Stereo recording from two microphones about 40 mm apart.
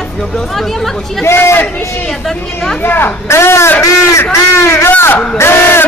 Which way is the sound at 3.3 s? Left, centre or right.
Left.